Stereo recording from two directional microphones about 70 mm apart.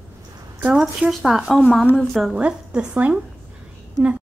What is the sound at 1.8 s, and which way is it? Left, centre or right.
Speech, left.